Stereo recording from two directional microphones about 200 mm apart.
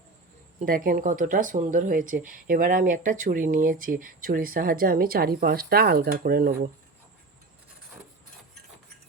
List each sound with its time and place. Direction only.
0.6 s speech: 45° right (ahead or behind)